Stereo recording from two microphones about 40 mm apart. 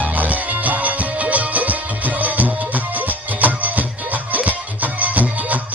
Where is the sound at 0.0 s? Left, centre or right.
Right.